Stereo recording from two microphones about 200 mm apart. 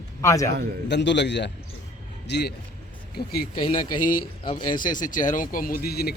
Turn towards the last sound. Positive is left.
turn(degrees=50)  # may be behind; listen again after turning